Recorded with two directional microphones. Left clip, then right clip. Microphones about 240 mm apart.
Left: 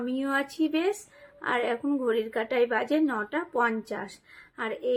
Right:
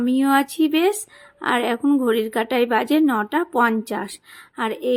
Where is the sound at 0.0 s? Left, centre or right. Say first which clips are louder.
Right 10 dB; right.